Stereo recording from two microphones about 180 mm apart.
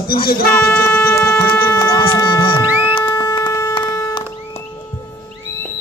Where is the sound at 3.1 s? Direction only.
20° left (ahead or behind).